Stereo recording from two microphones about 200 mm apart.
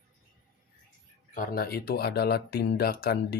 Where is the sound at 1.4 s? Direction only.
50° left (ahead or behind).